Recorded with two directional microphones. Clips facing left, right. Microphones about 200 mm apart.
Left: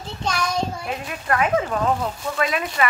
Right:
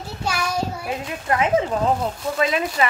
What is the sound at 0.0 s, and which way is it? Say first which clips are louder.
Child singing: even; 10° right (ahead or behind).